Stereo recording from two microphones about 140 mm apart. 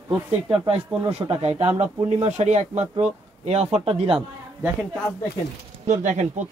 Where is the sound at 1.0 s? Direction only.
45° right (ahead or behind).